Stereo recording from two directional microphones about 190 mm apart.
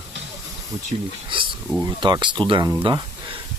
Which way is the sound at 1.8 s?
20° right (ahead or behind).